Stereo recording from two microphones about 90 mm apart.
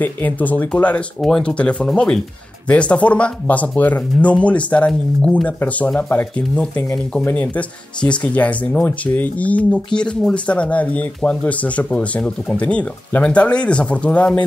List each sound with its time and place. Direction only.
0.0 s speech: 20° left (ahead or behind)